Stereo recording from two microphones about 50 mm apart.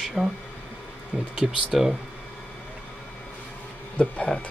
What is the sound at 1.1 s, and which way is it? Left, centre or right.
Speech, right.